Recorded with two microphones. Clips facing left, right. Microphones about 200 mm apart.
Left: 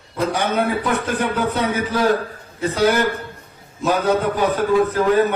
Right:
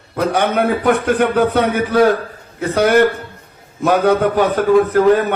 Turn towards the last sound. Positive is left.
turn(degrees=-60)  # may be behind; listen again after turning